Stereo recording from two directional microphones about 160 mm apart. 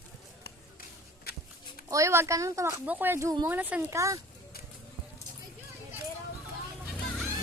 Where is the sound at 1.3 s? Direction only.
75° left (ahead or behind).